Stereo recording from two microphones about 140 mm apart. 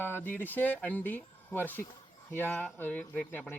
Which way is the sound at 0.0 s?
15° left (ahead or behind).